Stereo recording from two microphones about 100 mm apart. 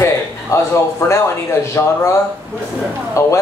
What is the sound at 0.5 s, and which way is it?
Speech, 30° left (ahead or behind).